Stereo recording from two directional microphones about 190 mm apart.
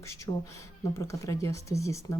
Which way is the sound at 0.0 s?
15° left (ahead or behind).